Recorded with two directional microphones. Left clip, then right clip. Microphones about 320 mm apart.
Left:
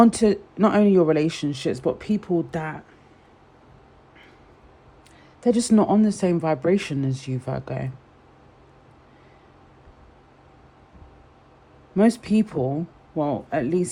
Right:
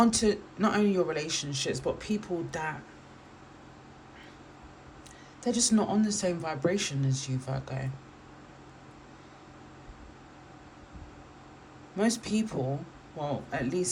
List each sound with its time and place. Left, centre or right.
0.0 s speech: left
5.4 s speech: left
11.9 s speech: left